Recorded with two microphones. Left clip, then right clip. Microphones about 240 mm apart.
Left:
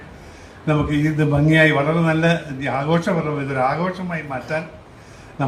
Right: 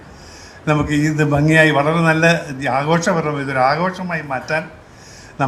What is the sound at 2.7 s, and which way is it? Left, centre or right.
Speech, right.